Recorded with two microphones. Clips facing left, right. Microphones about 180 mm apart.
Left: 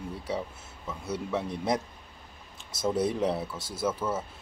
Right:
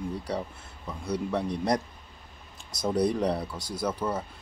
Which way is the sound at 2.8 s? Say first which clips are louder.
Right 1 dB; 5° left (ahead or behind).